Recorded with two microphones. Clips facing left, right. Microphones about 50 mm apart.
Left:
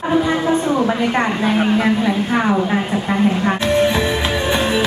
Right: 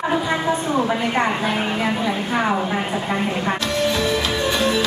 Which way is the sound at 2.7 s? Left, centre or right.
Centre.